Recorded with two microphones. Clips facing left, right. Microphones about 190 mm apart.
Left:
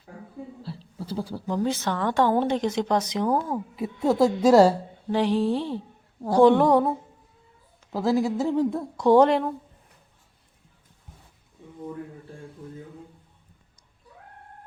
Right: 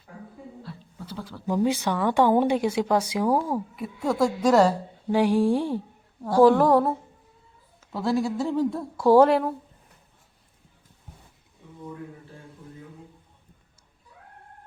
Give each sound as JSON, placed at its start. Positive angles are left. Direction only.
{"t": 0.6, "sound": "a sound", "side_deg": 30}
{"t": 1.5, "sound": "a woman's voice", "side_deg": -10}
{"t": 3.8, "sound": "speech", "side_deg": 25}
{"t": 5.0, "sound": "a woman's voice", "side_deg": -10}
{"t": 7.9, "sound": "speech", "side_deg": 20}
{"t": 9.0, "sound": "a woman's voice", "side_deg": -5}